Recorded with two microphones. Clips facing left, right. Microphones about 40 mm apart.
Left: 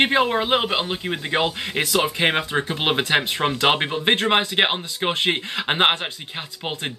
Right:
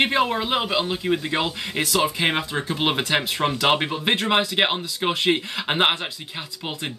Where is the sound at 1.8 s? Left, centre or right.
Left; by 5.9 s centre.